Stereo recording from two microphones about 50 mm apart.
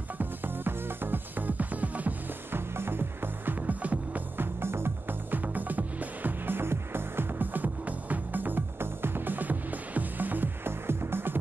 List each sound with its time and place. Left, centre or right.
0.2 s music: right
2.5 s music: right
4.4 s music: right